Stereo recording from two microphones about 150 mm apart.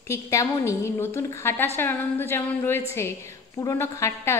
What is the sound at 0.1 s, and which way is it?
A woman's voice, 20° left (ahead or behind).